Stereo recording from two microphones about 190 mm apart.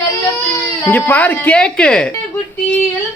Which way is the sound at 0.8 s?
10° left (ahead or behind).